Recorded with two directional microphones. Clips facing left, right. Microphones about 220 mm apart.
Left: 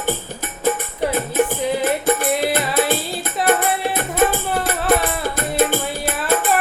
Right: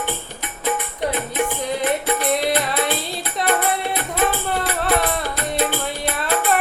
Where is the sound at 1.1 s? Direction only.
45° left (ahead or behind).